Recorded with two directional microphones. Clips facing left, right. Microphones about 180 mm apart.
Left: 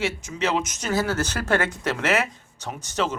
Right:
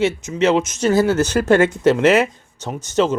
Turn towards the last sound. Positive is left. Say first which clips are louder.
# right 8 dB
turn(degrees=-25)  # may be behind; listen again after turning